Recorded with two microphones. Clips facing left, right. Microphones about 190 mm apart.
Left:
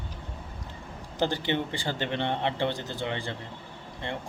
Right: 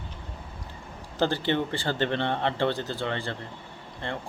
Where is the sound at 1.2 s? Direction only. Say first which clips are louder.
Right 2 dB; 15° left (ahead or behind).